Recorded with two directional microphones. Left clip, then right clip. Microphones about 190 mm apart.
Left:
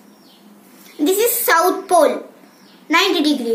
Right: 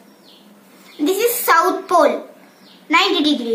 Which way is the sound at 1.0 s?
10° right (ahead or behind).